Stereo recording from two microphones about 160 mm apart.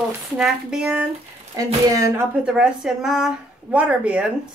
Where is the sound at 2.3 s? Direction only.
5° right (ahead or behind).